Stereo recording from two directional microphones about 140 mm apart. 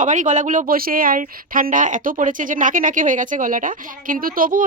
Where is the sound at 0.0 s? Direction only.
65° right (ahead or behind).